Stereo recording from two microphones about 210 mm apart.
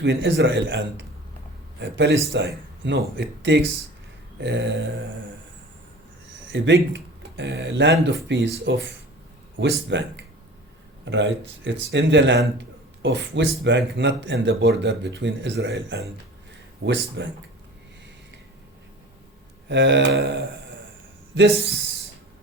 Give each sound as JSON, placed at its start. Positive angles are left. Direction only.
{"t": 0.0, "sound": "speech", "side_deg": -55}
{"t": 6.5, "sound": "speech", "side_deg": -60}
{"t": 19.6, "sound": "speech", "side_deg": -55}